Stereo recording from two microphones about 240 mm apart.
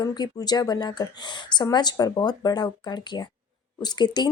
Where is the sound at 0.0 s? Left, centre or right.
Centre.